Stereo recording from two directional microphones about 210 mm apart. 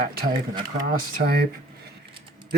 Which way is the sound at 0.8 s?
50° right (ahead or behind).